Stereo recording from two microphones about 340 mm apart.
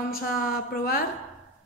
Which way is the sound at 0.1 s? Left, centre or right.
Left.